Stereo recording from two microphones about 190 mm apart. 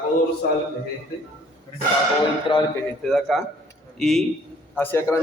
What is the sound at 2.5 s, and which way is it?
Speech, 25° left (ahead or behind).